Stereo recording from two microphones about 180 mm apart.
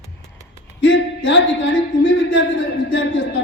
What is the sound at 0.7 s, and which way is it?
Speech, 90° left.